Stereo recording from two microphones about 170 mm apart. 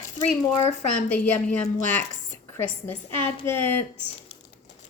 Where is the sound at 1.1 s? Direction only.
5° left (ahead or behind).